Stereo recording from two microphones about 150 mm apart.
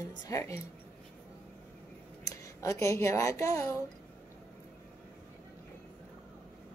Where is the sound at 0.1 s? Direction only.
25° left (ahead or behind).